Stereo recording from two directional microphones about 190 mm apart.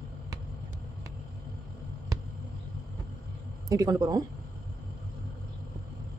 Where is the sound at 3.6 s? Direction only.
20° right (ahead or behind).